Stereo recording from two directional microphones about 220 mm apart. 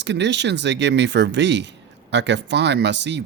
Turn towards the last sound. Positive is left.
turn(degrees=-50)  # may be behind; listen again after turning